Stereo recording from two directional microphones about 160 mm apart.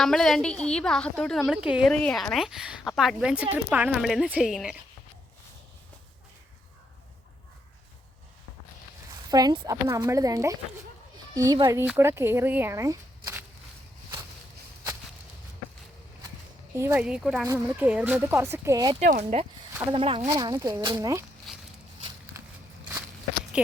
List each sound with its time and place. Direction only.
0.0 s a woman's voice: centre (ahead or behind)
1.9 s a woman's voice: 5° left (ahead or behind)
9.3 s speech: 25° right (ahead or behind)
11.9 s speech: 15° right (ahead or behind)
16.7 s a woman's voice: 15° right (ahead or behind)
18.9 s speech: 50° right (ahead or behind)
19.9 s speech: 35° right (ahead or behind)
20.3 s speech: 25° right (ahead or behind)
21.5 s a sound: centre (ahead or behind)